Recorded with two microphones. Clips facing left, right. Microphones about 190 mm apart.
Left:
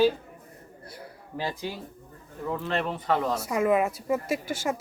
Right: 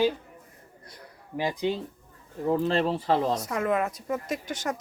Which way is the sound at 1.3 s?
15° right (ahead or behind).